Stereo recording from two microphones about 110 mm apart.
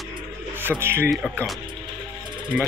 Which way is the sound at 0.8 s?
20° right (ahead or behind).